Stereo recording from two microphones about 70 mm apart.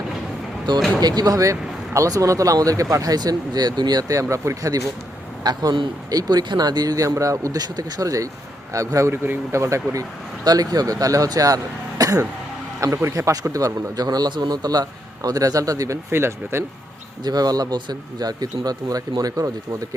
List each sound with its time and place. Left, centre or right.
0.7 s speech: right
1.0 s speech: right
1.4 s a man's voice: right
4.1 s speech: right
5.4 s a man's voice: right
12.8 s a man's voice: right
16.1 s speech: right
17.2 s speech: right